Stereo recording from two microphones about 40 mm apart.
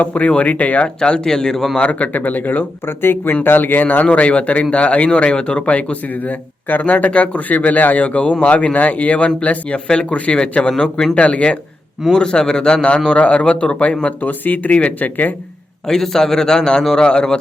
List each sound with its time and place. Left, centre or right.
0.0 s speech: left
1.2 s a man's voice: centre
1.7 s speech: left
2.8 s speech: left
3.4 s speech: left
4.0 s speech: left
9.7 s speech: left
12.1 s speech: left
14.2 s speech: left
15.9 s a man's voice: centre